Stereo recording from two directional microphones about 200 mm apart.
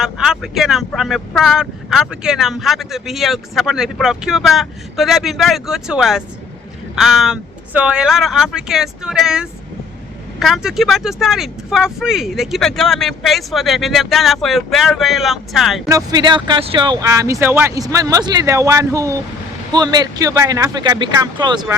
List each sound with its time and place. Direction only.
0.0 s speech: centre (ahead or behind)
15.9 s speech: 20° right (ahead or behind)